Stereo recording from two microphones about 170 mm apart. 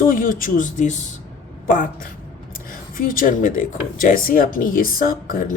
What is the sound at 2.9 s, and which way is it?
A man's voice, 55° left (ahead or behind).